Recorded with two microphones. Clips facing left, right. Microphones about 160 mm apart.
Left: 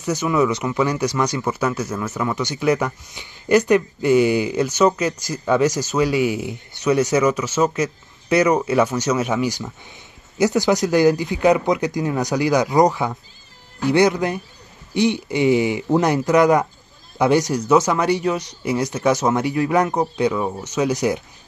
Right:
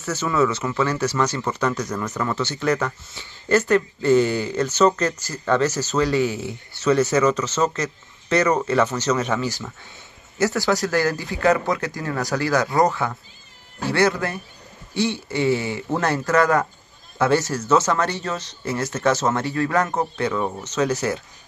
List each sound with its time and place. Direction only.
0.0 s speech: 15° left (ahead or behind)